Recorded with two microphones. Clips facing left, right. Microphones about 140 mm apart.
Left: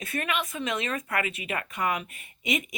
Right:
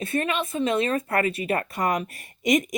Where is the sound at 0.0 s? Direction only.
30° right (ahead or behind).